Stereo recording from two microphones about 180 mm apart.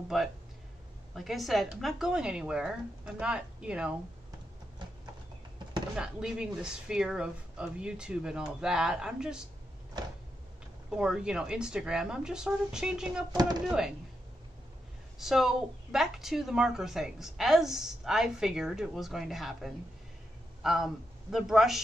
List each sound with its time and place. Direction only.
0.1 s a woman's voice: centre (ahead or behind)
5.9 s a woman's voice: 5° right (ahead or behind)
11.0 s a woman's voice: 5° right (ahead or behind)
13.3 s speech: 25° right (ahead or behind)
13.7 s a woman's voice: 5° right (ahead or behind)
15.1 s a woman's voice: centre (ahead or behind)